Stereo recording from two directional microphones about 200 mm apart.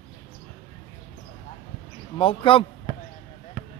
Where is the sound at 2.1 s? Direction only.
25° left (ahead or behind).